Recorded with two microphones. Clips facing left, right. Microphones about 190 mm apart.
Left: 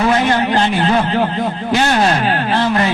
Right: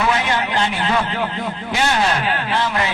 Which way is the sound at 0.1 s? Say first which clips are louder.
Left 6 dB; 45° left (ahead or behind).